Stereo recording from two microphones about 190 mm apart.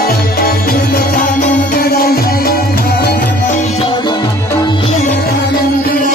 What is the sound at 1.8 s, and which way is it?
Music, 50° left (ahead or behind).